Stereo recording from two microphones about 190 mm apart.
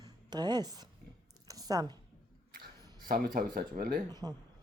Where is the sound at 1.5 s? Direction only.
20° right (ahead or behind).